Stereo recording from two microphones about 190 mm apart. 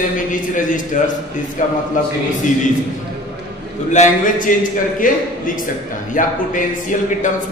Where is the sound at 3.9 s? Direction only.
40° left (ahead or behind).